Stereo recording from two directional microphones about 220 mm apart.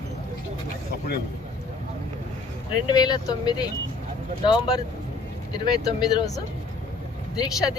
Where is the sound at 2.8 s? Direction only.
15° left (ahead or behind).